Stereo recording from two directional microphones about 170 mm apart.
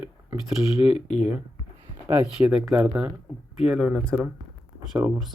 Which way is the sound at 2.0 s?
10° right (ahead or behind).